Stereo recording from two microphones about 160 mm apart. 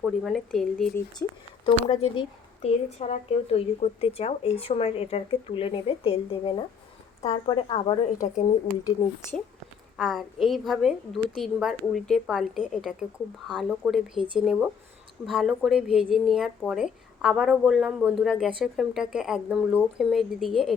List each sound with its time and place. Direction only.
0.0 s a woman's voice: centre (ahead or behind)
1.2 s speech: 15° left (ahead or behind)
1.6 s a woman's voice: 35° left (ahead or behind)
10.0 s a woman's voice: centre (ahead or behind)